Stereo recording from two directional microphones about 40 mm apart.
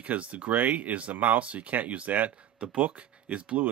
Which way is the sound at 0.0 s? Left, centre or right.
Right.